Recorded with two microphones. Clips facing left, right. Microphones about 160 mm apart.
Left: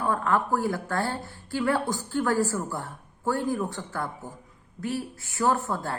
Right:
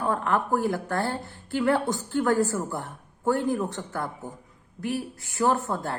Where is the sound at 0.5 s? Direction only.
20° right (ahead or behind).